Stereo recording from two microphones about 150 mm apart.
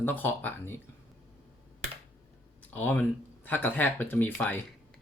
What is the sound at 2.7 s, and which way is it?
Speech, 10° left (ahead or behind).